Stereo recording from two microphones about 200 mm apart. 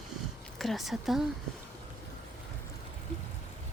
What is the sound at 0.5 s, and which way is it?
Speech, centre (ahead or behind).